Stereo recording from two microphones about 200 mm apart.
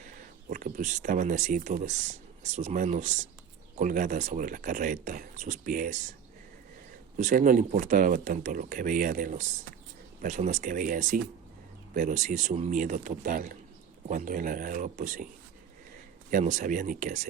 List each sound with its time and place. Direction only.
0.0 s speech: 40° right (ahead or behind)
7.2 s speech: 40° right (ahead or behind)
16.3 s speech: 35° right (ahead or behind)